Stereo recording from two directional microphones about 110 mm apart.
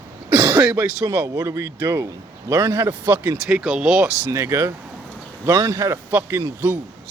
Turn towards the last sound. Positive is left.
turn(degrees=-25)  # may be behind; listen again after turning